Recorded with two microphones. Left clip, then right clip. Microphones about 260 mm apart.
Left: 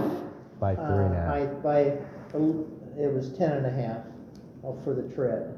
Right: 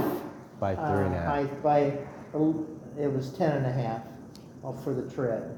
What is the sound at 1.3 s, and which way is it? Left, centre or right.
Speech, centre.